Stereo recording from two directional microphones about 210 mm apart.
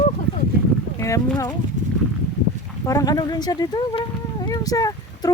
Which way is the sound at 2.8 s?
15° left (ahead or behind).